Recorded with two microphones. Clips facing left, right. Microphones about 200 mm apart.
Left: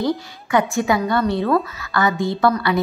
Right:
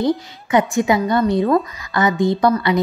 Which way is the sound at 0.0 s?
20° right (ahead or behind).